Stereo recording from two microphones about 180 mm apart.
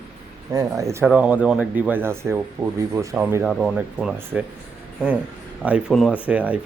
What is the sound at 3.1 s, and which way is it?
Speech, 10° right (ahead or behind).